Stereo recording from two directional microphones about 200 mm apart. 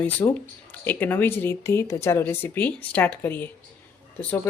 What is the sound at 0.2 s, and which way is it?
Speech, 20° left (ahead or behind).